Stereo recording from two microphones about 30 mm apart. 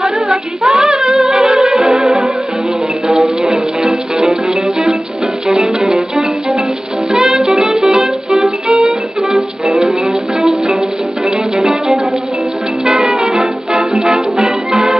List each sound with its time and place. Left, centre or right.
0.7 s female singing: right
1.0 s music: centre
1.3 s music: right
1.7 s music: centre
5.5 s music: centre
7.2 s music: right
8.8 s music: centre
11.5 s music: right
14.4 s music: right